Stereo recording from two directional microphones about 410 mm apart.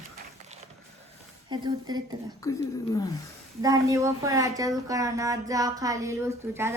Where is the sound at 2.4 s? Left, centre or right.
Centre.